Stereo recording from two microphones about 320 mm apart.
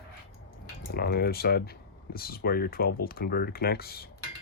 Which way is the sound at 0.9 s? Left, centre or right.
Left.